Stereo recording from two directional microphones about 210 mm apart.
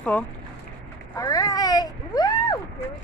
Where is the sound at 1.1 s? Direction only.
15° left (ahead or behind).